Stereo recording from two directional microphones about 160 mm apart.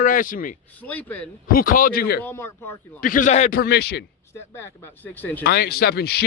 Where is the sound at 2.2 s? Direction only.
15° left (ahead or behind).